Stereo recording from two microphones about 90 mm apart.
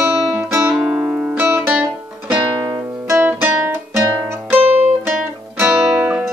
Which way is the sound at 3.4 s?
25° right (ahead or behind).